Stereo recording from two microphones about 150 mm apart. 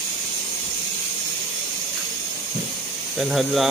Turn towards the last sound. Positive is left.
turn(degrees=0)  # may be behind; listen again after turning